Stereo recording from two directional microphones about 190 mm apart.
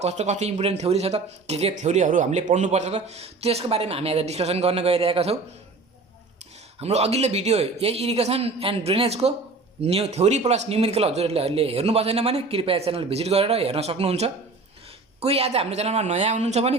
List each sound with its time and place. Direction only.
0.0 s speech: 35° right (ahead or behind)
6.7 s speech: 35° right (ahead or behind)